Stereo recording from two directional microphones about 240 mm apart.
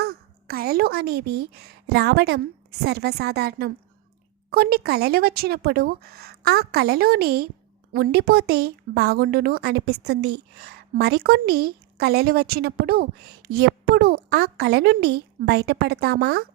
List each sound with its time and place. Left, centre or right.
0.0 s a woman's voice: right